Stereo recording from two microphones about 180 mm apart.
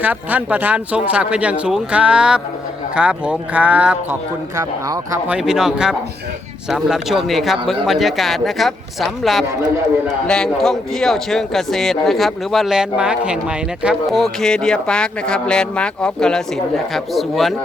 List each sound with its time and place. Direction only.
0.0 s a man's voice: 10° right (ahead or behind)
5.4 s speech: centre (ahead or behind)